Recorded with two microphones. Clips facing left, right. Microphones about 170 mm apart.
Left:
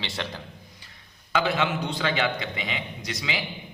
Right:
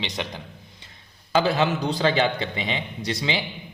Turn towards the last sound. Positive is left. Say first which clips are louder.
# right 5 dB
turn(degrees=-30)  # may be behind; listen again after turning